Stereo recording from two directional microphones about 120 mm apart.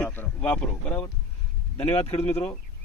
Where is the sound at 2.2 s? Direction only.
20° left (ahead or behind).